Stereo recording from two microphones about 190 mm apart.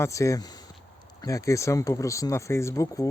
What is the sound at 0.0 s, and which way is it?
Speech, 15° left (ahead or behind).